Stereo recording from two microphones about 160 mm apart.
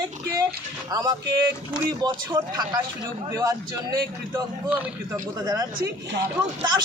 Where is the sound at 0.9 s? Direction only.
25° right (ahead or behind).